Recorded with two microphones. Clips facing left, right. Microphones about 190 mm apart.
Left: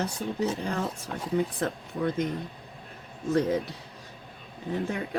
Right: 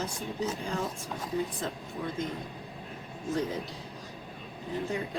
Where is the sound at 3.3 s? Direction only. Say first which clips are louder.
Left 6 dB; 70° left (ahead or behind).